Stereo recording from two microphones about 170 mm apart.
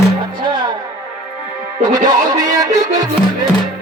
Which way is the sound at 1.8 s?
25° right (ahead or behind).